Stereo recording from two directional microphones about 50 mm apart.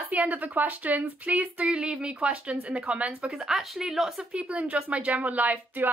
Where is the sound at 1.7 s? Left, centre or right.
Centre.